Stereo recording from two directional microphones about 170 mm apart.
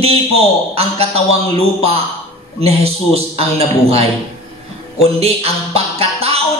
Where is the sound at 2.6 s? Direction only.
35° right (ahead or behind).